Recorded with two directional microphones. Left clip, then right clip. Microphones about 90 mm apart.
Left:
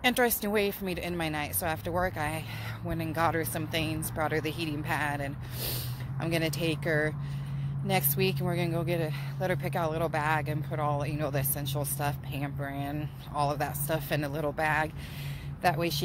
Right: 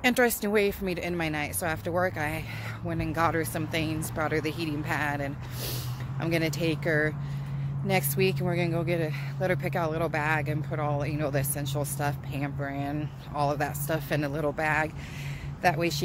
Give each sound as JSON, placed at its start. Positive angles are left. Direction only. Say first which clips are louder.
{"t": 0.0, "sound": "speech", "louder": "right 2 dB", "side_deg": -35}